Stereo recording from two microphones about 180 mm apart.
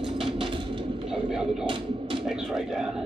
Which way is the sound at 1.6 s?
30° right (ahead or behind).